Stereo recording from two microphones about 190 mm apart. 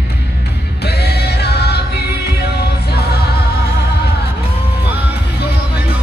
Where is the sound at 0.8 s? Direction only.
60° left (ahead or behind).